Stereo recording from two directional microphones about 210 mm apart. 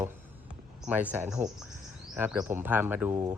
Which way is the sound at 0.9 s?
10° right (ahead or behind).